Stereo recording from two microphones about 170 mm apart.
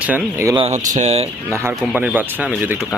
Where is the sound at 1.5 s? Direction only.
15° right (ahead or behind).